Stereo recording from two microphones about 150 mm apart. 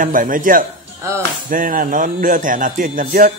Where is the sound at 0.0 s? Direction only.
65° right (ahead or behind).